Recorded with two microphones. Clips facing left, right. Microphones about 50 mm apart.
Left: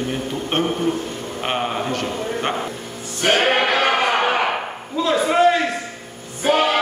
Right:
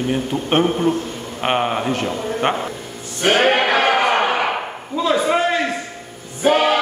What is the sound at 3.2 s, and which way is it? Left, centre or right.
Music, centre.